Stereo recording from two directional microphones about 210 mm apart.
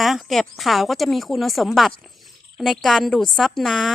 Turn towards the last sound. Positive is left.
turn(degrees=0)  # may be behind; listen again after turning